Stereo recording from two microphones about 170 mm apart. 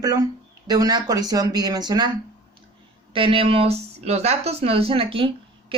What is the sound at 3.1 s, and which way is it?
Speech, 30° right (ahead or behind).